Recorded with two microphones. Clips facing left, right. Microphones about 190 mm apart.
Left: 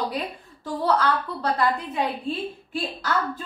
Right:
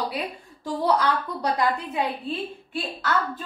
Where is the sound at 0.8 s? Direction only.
15° right (ahead or behind).